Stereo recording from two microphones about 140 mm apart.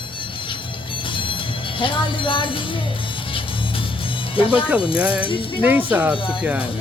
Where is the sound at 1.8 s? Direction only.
40° left (ahead or behind).